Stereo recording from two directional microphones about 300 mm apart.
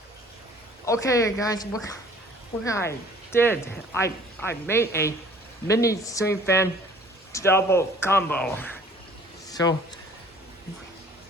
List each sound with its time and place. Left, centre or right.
0.9 s a man's voice: centre